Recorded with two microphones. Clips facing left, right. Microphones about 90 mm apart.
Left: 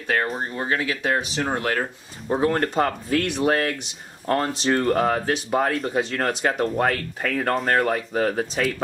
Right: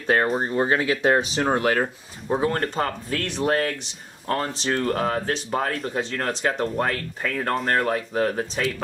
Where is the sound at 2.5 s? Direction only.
5° left (ahead or behind).